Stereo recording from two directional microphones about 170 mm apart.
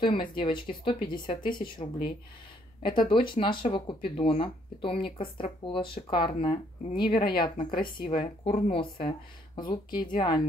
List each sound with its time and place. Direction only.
0.0 s speech: 30° left (ahead or behind)